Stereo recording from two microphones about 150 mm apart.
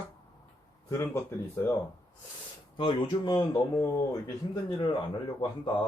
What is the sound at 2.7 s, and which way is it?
Speech, 35° left (ahead or behind).